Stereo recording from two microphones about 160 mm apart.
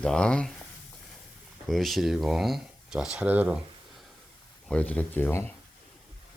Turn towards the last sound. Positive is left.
turn(degrees=10)  # may be behind; listen again after turning